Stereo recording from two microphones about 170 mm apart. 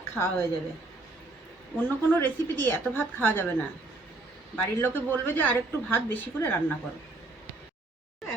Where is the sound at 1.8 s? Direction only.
10° left (ahead or behind).